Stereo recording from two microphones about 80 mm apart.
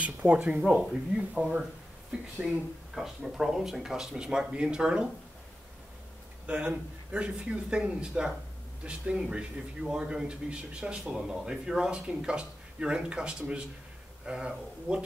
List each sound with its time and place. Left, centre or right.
0.0 s speech: centre
1.3 s speech: centre
6.4 s speech: centre